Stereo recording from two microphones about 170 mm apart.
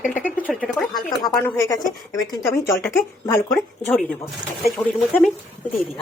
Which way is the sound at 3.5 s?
5° left (ahead or behind).